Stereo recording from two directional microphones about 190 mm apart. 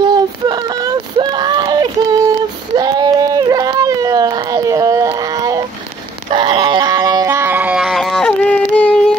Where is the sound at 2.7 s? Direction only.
20° right (ahead or behind).